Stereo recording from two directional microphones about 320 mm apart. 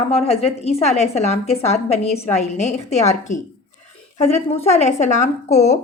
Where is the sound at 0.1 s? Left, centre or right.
Centre.